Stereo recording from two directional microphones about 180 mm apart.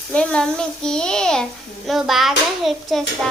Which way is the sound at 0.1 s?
5° left (ahead or behind).